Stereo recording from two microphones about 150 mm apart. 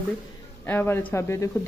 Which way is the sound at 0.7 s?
15° left (ahead or behind).